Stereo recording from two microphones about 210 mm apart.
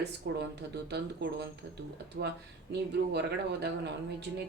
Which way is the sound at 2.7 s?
50° right (ahead or behind).